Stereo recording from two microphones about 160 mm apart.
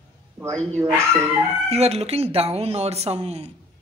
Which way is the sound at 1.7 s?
40° right (ahead or behind).